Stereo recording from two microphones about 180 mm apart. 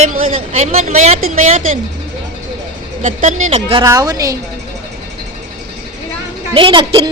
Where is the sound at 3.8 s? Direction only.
20° right (ahead or behind).